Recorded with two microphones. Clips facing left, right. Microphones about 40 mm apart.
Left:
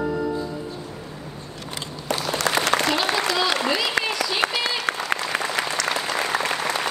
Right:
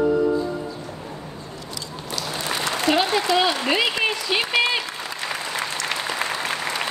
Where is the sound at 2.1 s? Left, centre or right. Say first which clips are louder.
Left 5 dB; left.